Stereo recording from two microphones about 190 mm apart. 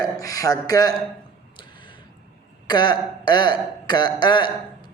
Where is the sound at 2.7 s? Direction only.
20° left (ahead or behind).